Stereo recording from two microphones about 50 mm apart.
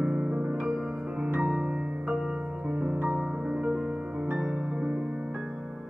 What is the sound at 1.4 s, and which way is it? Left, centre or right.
Music, centre.